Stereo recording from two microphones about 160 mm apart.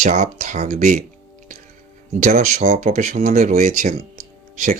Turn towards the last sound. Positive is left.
turn(degrees=-50)  # may be behind; listen again after turning